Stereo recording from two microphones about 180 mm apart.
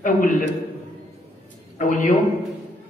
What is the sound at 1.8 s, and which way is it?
Speech, 45° left (ahead or behind).